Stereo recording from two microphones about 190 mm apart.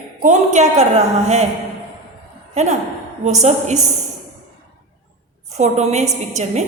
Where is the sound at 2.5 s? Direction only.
35° right (ahead or behind).